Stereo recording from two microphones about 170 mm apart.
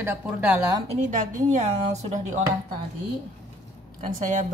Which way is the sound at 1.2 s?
45° right (ahead or behind).